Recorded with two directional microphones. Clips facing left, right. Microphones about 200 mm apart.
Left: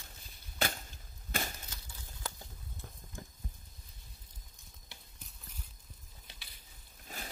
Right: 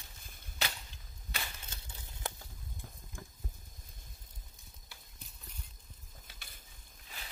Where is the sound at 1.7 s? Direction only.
25° right (ahead or behind).